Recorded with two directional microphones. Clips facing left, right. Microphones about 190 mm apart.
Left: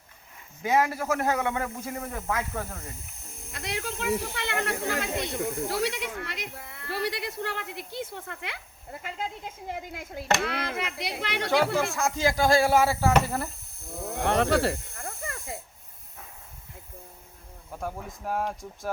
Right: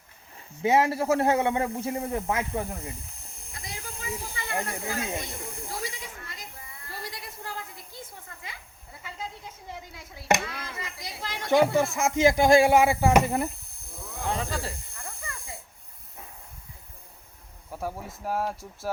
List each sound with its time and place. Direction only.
0.6 s speech: 25° right (ahead or behind)
3.5 s speech: 70° left (ahead or behind)
9.7 s speech: 50° left (ahead or behind)
10.4 s speech: 70° left (ahead or behind)
11.9 s speech: 20° right (ahead or behind)
13.9 s speech: 45° left (ahead or behind)
14.2 s speech: 70° left (ahead or behind)
14.9 s snake: 45° left (ahead or behind)
17.7 s speech: 10° right (ahead or behind)